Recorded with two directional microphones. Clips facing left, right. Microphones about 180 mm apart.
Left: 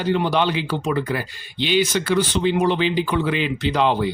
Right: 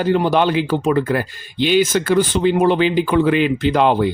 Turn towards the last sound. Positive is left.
turn(degrees=-50)  # may be behind; listen again after turning